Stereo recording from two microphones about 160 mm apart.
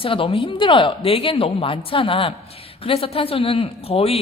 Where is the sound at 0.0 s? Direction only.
35° left (ahead or behind).